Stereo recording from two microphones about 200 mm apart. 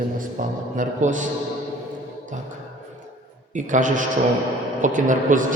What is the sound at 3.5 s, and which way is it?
A man's voice, 40° right (ahead or behind).